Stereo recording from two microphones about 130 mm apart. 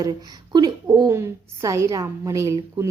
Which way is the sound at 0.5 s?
30° right (ahead or behind).